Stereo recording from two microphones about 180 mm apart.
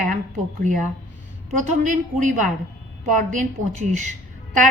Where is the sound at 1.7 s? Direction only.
45° right (ahead or behind).